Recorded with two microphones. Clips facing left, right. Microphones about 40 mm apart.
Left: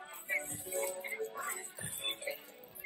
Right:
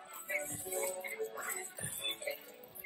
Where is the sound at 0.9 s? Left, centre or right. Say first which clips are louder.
Left 1 dB; left.